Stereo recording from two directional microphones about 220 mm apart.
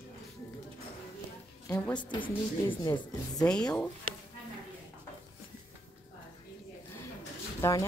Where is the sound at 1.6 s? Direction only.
15° left (ahead or behind).